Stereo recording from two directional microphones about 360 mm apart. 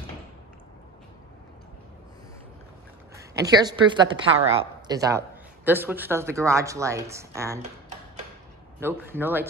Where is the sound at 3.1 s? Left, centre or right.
Centre.